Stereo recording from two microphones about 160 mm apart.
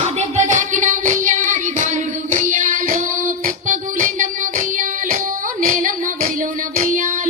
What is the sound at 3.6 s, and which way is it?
Music, 55° right (ahead or behind).